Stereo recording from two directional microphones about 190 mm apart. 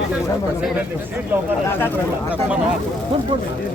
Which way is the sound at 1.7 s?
10° left (ahead or behind).